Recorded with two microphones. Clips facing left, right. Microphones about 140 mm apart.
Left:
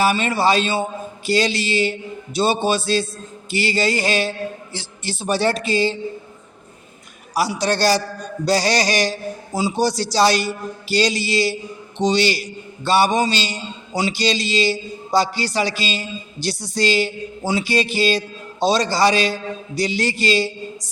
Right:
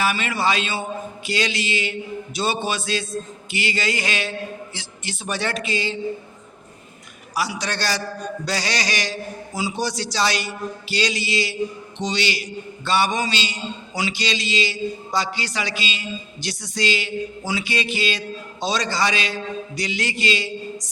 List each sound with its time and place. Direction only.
0.0 s a man's voice: 35° left (ahead or behind)
7.3 s a man's voice: 35° left (ahead or behind)